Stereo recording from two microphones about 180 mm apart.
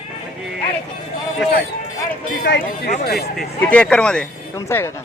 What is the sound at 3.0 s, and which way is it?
Speech, 60° left (ahead or behind).